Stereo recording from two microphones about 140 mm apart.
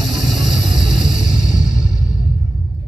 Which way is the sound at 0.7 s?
5° right (ahead or behind).